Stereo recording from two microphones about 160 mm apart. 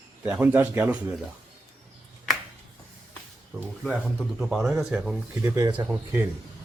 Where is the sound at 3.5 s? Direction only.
10° right (ahead or behind).